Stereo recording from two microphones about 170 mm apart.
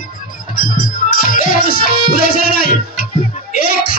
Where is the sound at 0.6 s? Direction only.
55° left (ahead or behind).